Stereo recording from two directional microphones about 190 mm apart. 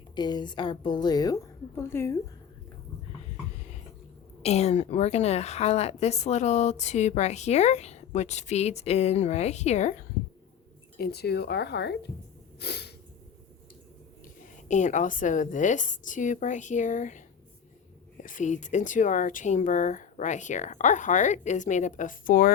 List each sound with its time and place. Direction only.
0.2 s a woman's voice: 20° left (ahead or behind)
4.4 s a woman's voice: 35° left (ahead or behind)
10.9 s speech: 55° left (ahead or behind)
12.5 s snort: 60° left (ahead or behind)
14.7 s a woman's voice: 40° left (ahead or behind)